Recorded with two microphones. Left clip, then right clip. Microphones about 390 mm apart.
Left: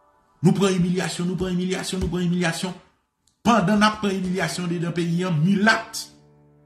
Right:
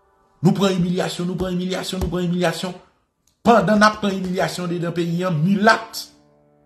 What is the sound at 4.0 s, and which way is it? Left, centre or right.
Music, centre.